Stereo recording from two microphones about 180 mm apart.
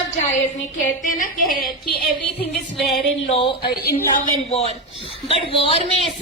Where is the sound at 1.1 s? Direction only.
50° left (ahead or behind).